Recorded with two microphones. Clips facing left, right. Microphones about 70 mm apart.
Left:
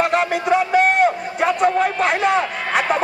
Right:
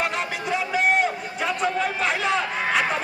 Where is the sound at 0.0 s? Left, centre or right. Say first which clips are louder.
Left 8 dB; left.